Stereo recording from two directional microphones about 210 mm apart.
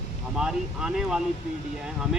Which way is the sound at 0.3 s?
5° right (ahead or behind).